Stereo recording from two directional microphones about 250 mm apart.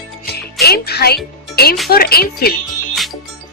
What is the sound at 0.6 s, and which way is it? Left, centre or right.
Speech, left.